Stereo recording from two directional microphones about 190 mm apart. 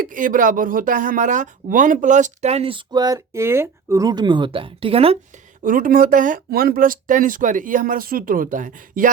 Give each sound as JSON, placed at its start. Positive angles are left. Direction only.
{"t": 0.0, "sound": "speech", "side_deg": -45}
{"t": 5.6, "sound": "speech", "side_deg": -45}